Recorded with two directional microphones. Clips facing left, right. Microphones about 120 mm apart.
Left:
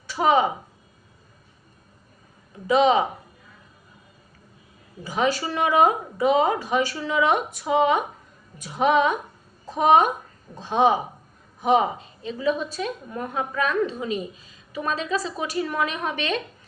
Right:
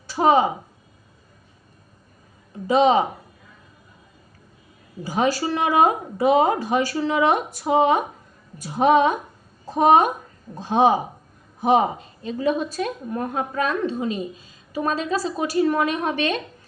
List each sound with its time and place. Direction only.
0.1 s speech: 35° right (ahead or behind)
2.6 s a woman's voice: 35° right (ahead or behind)
5.0 s a woman's voice: 40° right (ahead or behind)